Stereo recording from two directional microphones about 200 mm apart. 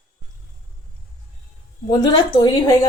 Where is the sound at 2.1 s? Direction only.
20° left (ahead or behind).